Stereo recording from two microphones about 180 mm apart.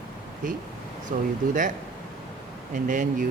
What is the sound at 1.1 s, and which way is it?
Speech, 45° right (ahead or behind).